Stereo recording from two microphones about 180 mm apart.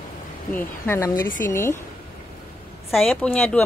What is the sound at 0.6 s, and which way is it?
Speech, 15° left (ahead or behind).